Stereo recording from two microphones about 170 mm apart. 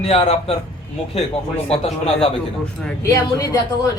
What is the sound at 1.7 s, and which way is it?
Speech, 35° left (ahead or behind).